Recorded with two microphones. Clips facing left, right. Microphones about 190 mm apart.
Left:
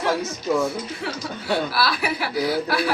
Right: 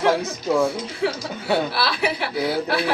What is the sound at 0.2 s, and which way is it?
Speech, 30° right (ahead or behind).